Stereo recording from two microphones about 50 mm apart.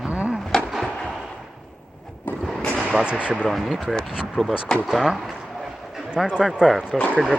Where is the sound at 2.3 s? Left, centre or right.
Left.